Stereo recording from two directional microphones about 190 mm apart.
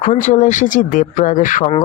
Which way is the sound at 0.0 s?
40° left (ahead or behind).